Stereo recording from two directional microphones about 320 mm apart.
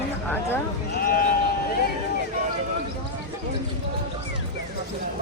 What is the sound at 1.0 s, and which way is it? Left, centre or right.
Sheep, left.